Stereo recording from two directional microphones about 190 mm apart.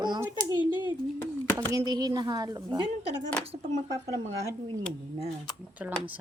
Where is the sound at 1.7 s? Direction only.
20° right (ahead or behind).